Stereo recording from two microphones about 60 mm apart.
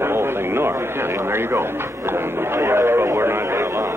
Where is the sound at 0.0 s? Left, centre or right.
Right.